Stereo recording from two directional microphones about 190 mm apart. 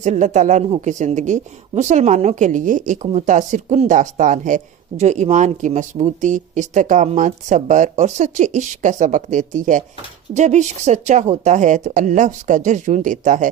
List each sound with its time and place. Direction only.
0.0 s speech: 40° right (ahead or behind)